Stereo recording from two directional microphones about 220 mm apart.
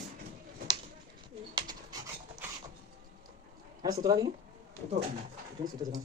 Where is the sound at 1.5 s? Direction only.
20° right (ahead or behind).